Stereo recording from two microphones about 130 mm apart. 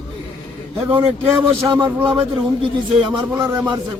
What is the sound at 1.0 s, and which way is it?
Speech, 40° right (ahead or behind).